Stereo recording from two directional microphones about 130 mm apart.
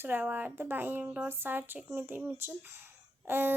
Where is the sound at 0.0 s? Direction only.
15° right (ahead or behind).